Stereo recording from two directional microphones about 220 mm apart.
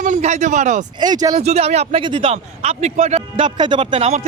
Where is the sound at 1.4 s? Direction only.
30° right (ahead or behind).